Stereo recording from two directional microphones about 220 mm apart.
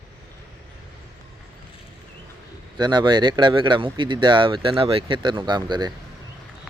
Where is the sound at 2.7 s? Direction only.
20° right (ahead or behind).